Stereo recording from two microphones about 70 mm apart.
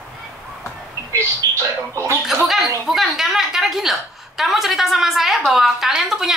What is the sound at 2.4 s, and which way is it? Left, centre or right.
A woman's voice, centre.